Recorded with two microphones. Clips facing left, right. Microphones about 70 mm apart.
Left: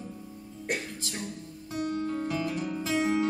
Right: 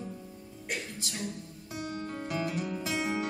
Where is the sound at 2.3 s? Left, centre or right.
Right.